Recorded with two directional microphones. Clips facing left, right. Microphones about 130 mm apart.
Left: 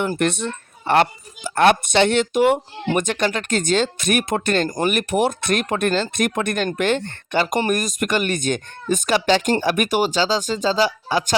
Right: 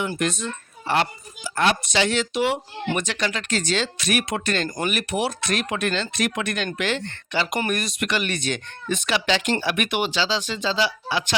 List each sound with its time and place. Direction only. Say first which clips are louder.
0.0 s a woman's voice: left 4 dB; 55° left (ahead or behind)